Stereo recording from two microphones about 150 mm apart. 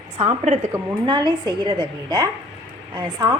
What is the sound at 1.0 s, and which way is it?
A woman's voice, 30° right (ahead or behind).